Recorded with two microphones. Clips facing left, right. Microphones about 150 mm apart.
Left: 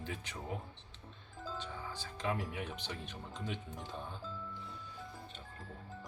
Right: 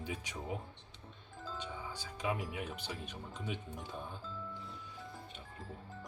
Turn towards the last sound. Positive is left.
turn(degrees=-5)  # may be behind; listen again after turning